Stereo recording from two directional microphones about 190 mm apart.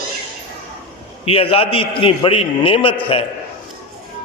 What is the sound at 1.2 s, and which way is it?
A man's voice, 30° left (ahead or behind).